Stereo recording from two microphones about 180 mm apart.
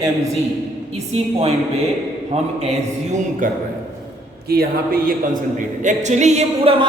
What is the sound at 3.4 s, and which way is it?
A man's voice, 50° right (ahead or behind).